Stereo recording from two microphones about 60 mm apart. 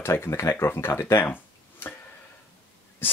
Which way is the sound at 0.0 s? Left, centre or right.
Left.